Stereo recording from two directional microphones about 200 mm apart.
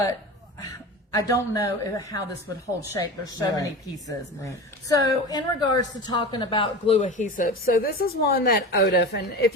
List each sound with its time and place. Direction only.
0.6 s a man's voice: 15° left (ahead or behind); by 9.5 s 55° left (ahead or behind)